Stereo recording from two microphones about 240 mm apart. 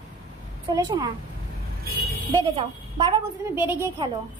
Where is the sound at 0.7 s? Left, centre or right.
Centre.